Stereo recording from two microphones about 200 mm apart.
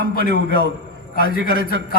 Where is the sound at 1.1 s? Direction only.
45° left (ahead or behind).